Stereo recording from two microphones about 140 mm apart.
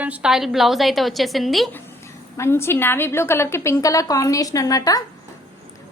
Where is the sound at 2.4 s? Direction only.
15° left (ahead or behind).